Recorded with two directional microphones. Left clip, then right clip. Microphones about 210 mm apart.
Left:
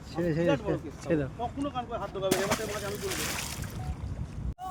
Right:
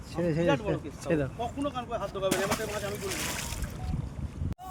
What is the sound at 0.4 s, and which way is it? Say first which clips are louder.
Speech: even; 35° right (ahead or behind).